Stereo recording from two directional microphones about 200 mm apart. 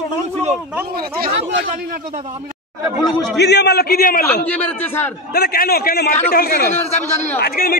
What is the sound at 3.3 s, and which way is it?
Speech, 55° left (ahead or behind).